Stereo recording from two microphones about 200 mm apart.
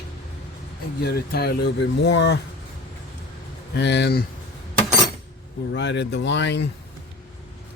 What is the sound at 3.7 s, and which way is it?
Speech, 60° left (ahead or behind).